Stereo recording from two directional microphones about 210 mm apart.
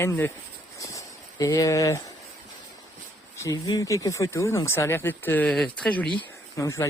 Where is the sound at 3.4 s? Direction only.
15° left (ahead or behind).